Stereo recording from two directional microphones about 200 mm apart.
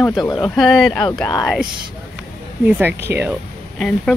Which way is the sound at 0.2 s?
20° left (ahead or behind).